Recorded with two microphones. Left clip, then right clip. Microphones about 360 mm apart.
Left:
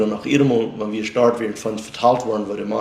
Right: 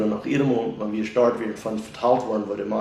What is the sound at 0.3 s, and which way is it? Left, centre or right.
Speech, left.